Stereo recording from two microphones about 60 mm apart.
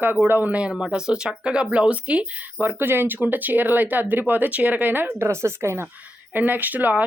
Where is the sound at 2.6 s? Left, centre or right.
Right.